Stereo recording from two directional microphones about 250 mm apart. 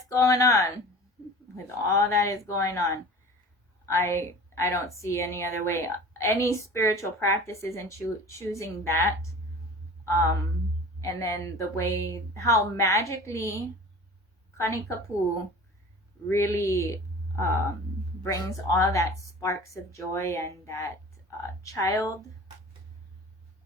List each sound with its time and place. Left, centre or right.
0.0 s a woman's voice: centre
10.1 s a woman's voice: centre
14.6 s a woman's voice: centre
16.3 s a woman's voice: centre